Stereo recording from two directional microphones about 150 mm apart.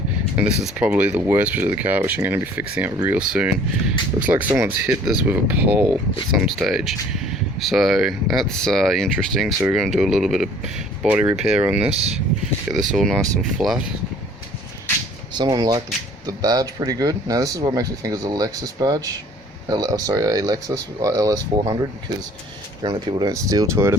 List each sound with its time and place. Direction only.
0.3 s speech: 10° right (ahead or behind)
15.4 s speech: 25° right (ahead or behind)
22.8 s speech: 30° right (ahead or behind)